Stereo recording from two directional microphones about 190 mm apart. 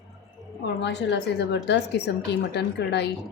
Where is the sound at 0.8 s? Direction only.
65° left (ahead or behind).